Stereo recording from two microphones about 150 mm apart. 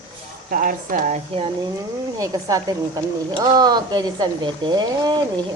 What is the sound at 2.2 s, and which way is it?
Speech, 20° right (ahead or behind).